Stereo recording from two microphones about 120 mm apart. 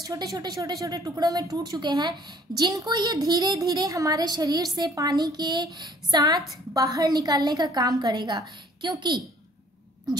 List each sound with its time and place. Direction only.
0.0 s speech: 30° right (ahead or behind)